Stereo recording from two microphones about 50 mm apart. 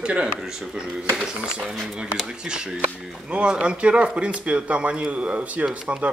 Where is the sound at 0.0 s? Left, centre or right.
Right.